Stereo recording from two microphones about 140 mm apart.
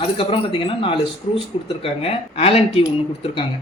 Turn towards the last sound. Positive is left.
turn(degrees=40)  # may be behind; listen again after turning